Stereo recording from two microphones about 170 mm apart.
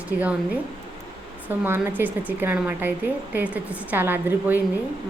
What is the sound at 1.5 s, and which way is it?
A woman's voice, 15° right (ahead or behind).